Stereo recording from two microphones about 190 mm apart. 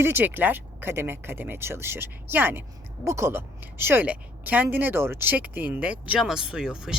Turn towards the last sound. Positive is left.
turn(degrees=-5)  # may be behind; listen again after turning